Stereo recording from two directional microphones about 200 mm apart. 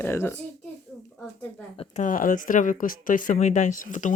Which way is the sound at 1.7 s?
30° left (ahead or behind).